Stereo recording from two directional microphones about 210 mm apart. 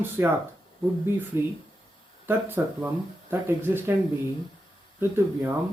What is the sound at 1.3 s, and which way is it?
Speech, 10° right (ahead or behind).